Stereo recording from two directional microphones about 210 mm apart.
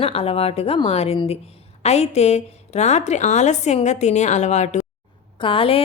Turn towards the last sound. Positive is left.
turn(degrees=25)  # may be behind; listen again after turning